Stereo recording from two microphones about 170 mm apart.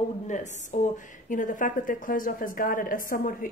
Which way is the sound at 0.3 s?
45° left (ahead or behind).